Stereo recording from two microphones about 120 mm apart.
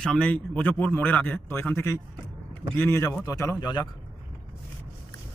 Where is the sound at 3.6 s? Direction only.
35° left (ahead or behind).